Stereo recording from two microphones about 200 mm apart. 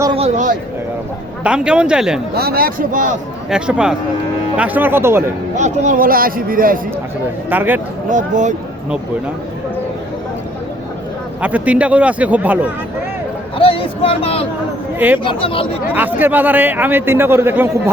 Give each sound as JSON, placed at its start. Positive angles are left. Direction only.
{"t": 0.0, "sound": "a sound", "side_deg": -25}
{"t": 1.5, "sound": "speech", "side_deg": -5}
{"t": 2.3, "sound": "speech", "side_deg": -50}
{"t": 3.5, "sound": "a man's voice", "side_deg": -5}
{"t": 5.5, "sound": "speech", "side_deg": -35}
{"t": 7.5, "sound": "a man's voice", "side_deg": -10}
{"t": 8.1, "sound": "speech", "side_deg": -35}
{"t": 11.3, "sound": "a man's voice", "side_deg": -5}
{"t": 13.6, "sound": "speech", "side_deg": 25}
{"t": 14.9, "sound": "speech", "side_deg": -10}
{"t": 15.2, "sound": "speech", "side_deg": 25}
{"t": 16.0, "sound": "a man's voice", "side_deg": -10}